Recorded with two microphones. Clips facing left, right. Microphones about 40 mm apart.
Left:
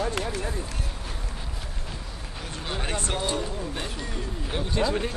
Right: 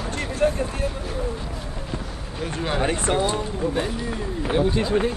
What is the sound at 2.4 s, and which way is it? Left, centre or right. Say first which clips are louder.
Speech: right 9 dB; right.